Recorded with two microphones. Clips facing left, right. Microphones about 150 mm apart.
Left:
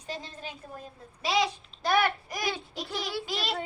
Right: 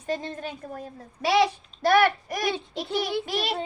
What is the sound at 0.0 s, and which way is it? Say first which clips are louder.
Speech: right 8 dB; 50° right (ahead or behind).